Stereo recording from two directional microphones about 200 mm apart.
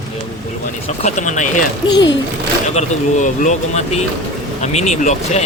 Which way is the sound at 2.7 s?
35° left (ahead or behind).